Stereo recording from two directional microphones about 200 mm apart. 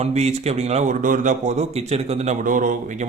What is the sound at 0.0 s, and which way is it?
A man's voice, 35° right (ahead or behind).